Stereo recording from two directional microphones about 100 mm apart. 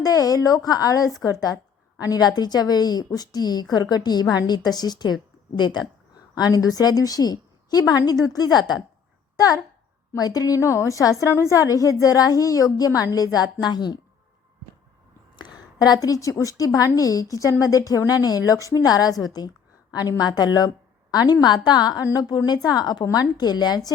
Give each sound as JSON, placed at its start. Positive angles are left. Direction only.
{"t": 0.0, "sound": "a woman's voice", "side_deg": 40}
{"t": 10.2, "sound": "a woman's voice", "side_deg": 40}
{"t": 15.4, "sound": "a woman's voice", "side_deg": 45}